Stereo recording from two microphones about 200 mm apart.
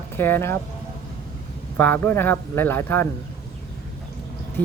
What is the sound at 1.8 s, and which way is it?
Speech, 10° left (ahead or behind).